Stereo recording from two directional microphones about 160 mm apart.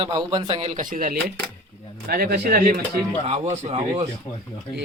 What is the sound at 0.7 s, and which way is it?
Speech, 55° right (ahead or behind).